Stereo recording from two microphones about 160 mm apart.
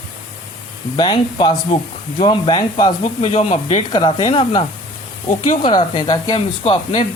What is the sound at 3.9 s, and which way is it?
Speech, 30° left (ahead or behind).